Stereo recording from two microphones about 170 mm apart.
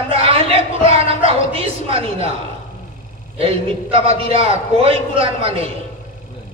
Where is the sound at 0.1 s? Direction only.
35° right (ahead or behind).